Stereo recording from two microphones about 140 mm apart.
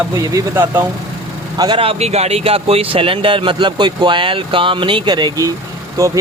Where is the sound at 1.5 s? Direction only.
30° right (ahead or behind).